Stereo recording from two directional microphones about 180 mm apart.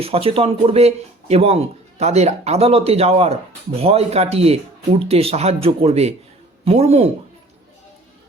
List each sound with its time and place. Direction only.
0.0 s speech: 30° right (ahead or behind)